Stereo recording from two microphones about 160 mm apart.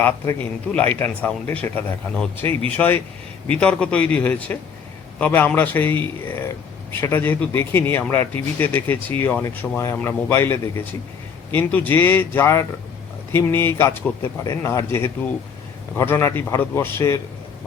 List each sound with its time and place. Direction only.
0.0 s speech: 10° left (ahead or behind)